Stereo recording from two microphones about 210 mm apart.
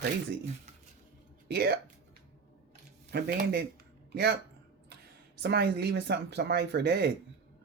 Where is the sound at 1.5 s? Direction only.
50° right (ahead or behind).